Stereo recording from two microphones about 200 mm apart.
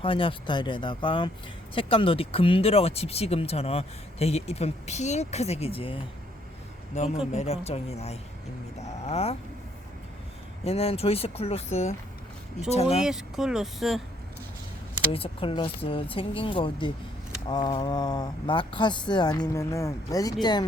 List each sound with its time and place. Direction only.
0.0 s speech: 25° left (ahead or behind)
10.6 s speech: 30° left (ahead or behind)
13.0 s speech: 5° right (ahead or behind)
15.1 s speech: 25° left (ahead or behind)